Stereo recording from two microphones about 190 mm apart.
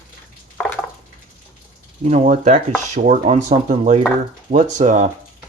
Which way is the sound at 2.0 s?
40° right (ahead or behind).